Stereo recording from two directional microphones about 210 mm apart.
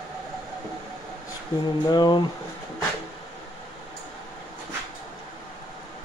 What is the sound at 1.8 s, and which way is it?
Speech, 20° left (ahead or behind).